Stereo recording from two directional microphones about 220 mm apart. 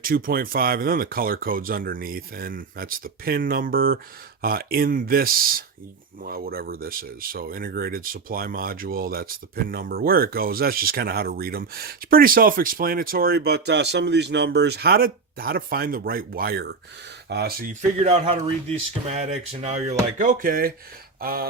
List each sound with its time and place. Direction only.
0.0 s speech: 40° right (ahead or behind)
18.0 s speech: 25° right (ahead or behind); by 21.4 s 45° right (ahead or behind)